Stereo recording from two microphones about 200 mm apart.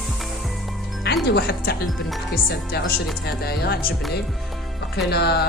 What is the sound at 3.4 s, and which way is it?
Speech, 50° left (ahead or behind).